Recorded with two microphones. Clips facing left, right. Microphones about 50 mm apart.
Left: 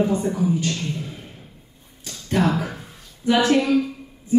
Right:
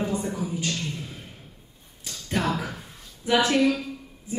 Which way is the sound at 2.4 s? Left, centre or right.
Left.